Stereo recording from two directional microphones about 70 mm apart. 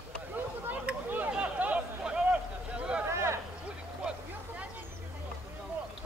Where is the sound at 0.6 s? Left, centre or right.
Right.